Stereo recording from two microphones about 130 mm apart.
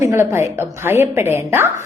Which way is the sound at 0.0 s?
20° right (ahead or behind).